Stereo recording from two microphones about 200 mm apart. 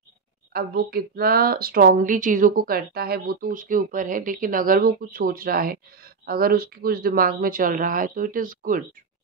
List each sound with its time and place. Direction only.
0.5 s speech: 50° right (ahead or behind)